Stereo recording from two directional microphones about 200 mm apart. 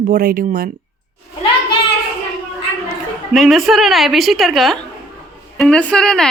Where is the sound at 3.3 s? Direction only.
Centre (ahead or behind).